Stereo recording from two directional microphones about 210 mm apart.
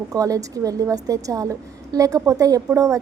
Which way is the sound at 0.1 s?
15° right (ahead or behind).